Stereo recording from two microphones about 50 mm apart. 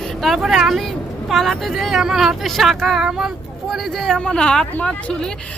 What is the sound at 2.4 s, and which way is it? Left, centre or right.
Speech, centre.